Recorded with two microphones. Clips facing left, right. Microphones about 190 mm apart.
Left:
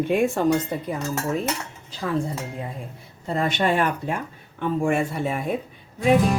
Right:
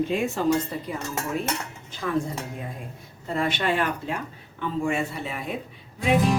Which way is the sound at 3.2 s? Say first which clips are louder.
Left 3 dB; 40° left (ahead or behind).